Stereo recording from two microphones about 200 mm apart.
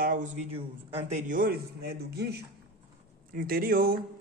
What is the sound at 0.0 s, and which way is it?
Speech, 45° right (ahead or behind).